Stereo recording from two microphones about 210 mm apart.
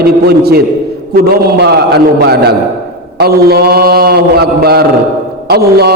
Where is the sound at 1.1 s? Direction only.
55° right (ahead or behind).